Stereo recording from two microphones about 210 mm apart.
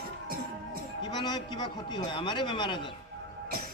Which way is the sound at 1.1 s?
20° left (ahead or behind).